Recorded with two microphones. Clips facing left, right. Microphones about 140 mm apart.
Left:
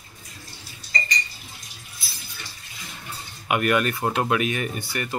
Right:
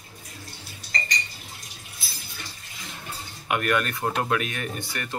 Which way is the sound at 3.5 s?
5° left (ahead or behind).